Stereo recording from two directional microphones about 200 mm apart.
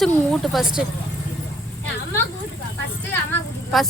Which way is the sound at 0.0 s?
Centre (ahead or behind).